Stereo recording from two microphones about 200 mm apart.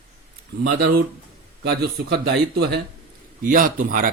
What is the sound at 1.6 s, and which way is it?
Speech, 55° right (ahead or behind).